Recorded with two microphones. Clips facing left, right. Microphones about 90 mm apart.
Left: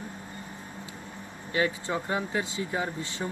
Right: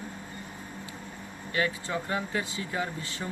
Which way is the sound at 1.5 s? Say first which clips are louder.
Left 2 dB; 25° left (ahead or behind).